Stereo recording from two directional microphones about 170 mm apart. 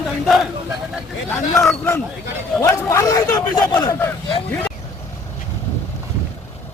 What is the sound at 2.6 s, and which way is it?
Speech, 20° left (ahead or behind).